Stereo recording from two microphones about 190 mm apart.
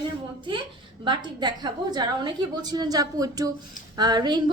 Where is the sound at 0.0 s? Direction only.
25° right (ahead or behind).